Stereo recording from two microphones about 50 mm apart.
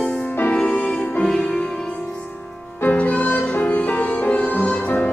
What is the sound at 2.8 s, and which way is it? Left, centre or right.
Music, left.